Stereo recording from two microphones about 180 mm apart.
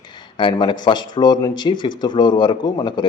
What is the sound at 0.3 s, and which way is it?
Speech, 25° left (ahead or behind).